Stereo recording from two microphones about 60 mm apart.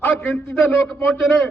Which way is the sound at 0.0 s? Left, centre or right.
Centre.